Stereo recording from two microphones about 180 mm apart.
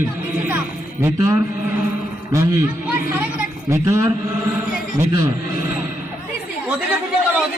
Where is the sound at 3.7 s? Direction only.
15° right (ahead or behind).